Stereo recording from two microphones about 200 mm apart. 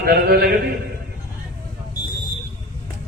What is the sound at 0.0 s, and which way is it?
Mantra, 50° right (ahead or behind).